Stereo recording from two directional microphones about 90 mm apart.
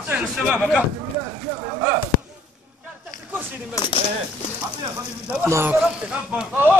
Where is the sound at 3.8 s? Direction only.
35° left (ahead or behind).